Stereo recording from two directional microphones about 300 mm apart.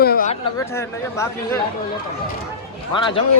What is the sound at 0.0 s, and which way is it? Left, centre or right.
Chatter, left.